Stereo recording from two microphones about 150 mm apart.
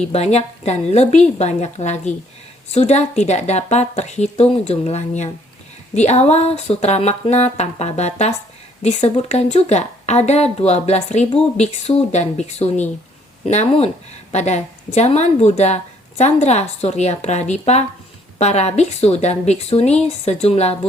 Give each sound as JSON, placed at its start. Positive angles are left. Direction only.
{"t": 0.1, "sound": "speech", "side_deg": 45}